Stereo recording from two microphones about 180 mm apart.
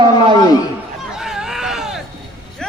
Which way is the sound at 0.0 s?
25° right (ahead or behind).